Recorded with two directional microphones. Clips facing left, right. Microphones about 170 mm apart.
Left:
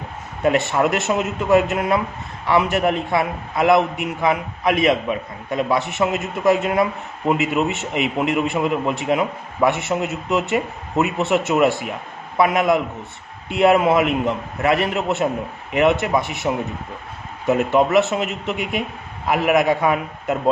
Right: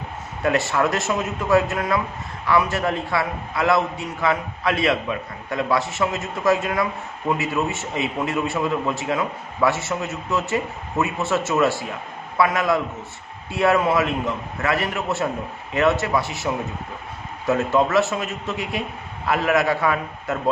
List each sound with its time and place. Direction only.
0.4 s a man's voice: 20° left (ahead or behind)